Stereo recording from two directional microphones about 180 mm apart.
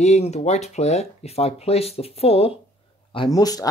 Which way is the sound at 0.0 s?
40° left (ahead or behind).